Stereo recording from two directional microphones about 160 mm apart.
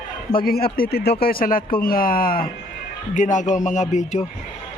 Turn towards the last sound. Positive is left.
turn(degrees=45)  # may be behind; listen again after turning